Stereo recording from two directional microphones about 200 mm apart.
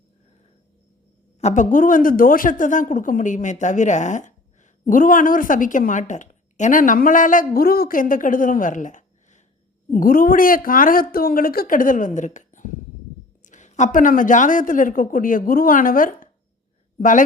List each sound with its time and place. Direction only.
1.4 s a woman's voice: 35° left (ahead or behind)